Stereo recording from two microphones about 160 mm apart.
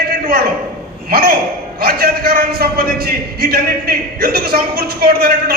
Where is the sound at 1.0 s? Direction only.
70° right (ahead or behind).